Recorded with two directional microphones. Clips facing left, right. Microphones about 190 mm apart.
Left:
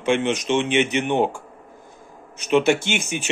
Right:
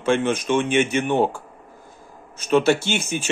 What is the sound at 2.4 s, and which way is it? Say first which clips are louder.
Speech: even; 15° left (ahead or behind).